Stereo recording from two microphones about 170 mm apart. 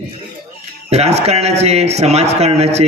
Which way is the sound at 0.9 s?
40° right (ahead or behind).